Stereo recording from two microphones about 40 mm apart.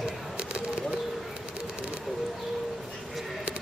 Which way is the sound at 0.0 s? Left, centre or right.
Right.